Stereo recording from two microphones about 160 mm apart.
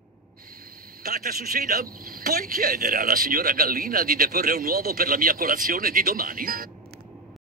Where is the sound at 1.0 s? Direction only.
65° right (ahead or behind).